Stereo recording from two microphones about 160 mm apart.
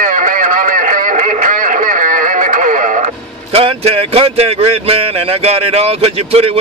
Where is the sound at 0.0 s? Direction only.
55° right (ahead or behind).